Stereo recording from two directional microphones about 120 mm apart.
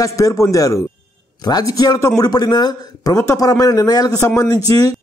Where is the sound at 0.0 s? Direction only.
25° left (ahead or behind).